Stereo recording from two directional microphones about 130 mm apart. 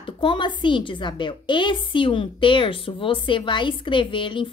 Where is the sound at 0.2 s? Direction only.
40° left (ahead or behind).